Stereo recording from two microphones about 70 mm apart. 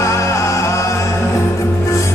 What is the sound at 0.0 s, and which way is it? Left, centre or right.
Music, left.